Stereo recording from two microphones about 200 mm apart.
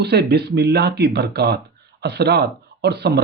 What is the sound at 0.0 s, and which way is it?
A man's voice, 55° right (ahead or behind).